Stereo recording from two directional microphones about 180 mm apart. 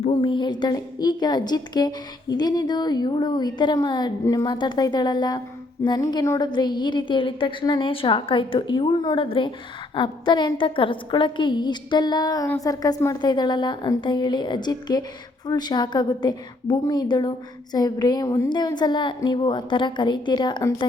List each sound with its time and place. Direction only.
0.0 s a woman's voice: 30° left (ahead or behind)